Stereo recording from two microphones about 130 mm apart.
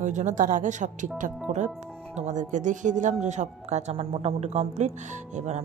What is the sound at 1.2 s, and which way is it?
Speech, 80° right.